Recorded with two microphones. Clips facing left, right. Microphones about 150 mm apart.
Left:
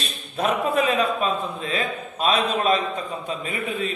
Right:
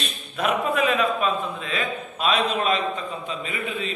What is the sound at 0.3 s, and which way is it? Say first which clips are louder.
A man's voice: left 1 dB; 35° left (ahead or behind).